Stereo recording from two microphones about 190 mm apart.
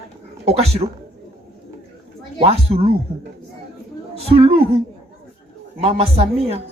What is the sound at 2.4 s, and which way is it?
Speech, 30° right (ahead or behind).